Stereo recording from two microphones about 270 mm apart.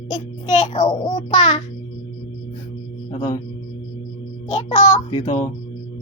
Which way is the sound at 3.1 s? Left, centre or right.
Left.